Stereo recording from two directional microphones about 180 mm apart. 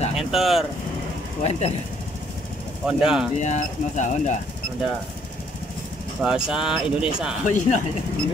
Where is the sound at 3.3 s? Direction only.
40° left (ahead or behind).